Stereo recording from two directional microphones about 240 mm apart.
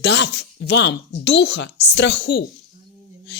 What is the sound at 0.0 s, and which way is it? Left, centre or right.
A woman's voice, left.